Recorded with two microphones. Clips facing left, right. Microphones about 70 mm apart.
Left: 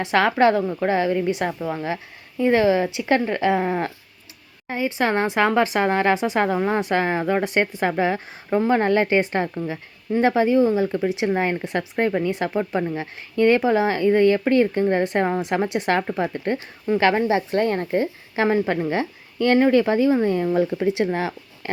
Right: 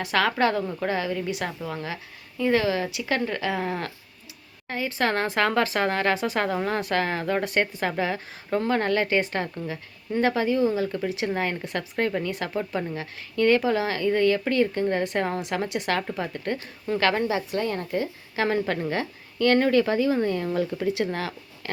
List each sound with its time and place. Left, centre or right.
0.0 s speech: left
18.4 s a woman's voice: centre